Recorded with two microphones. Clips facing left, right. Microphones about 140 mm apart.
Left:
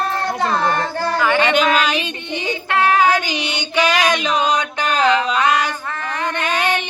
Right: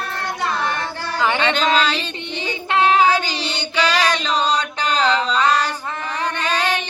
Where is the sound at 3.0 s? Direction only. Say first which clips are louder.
Left 1 dB; 15° left (ahead or behind).